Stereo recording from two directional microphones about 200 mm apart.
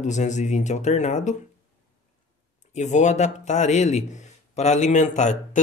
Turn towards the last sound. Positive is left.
turn(degrees=40)  # may be behind; listen again after turning